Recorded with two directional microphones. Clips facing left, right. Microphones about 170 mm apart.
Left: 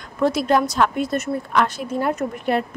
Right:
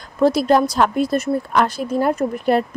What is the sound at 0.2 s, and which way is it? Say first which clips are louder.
A woman's voice: right 4 dB; 35° right (ahead or behind).